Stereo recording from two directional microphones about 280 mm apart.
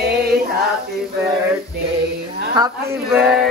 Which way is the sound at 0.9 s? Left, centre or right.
Centre.